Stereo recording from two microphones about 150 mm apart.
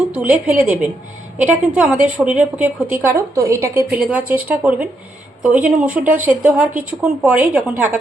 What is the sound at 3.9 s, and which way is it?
A woman's voice, 10° right (ahead or behind).